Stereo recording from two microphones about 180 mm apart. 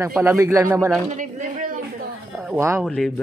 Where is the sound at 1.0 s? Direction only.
45° right (ahead or behind).